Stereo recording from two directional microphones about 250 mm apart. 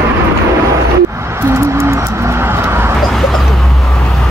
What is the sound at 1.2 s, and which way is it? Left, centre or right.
Vehicle, centre.